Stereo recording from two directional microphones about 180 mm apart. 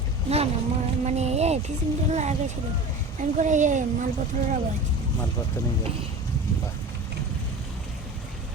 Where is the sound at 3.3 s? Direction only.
45° right (ahead or behind).